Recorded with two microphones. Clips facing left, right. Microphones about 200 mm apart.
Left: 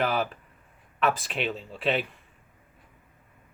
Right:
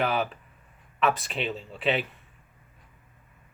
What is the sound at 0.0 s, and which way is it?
A man's voice, centre (ahead or behind).